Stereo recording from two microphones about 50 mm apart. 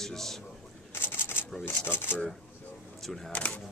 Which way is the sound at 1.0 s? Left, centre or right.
Left.